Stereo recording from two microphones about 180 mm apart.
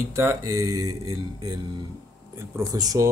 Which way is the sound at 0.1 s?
15° right (ahead or behind).